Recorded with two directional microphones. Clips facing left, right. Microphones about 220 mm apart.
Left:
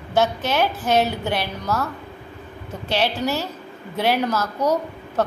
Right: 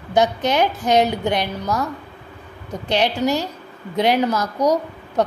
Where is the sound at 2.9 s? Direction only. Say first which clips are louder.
Right 3 dB; 15° right (ahead or behind).